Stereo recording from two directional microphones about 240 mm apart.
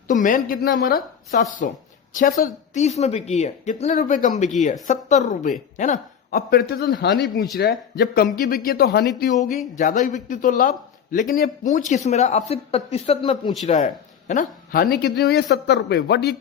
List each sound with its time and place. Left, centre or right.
0.1 s a man's voice: left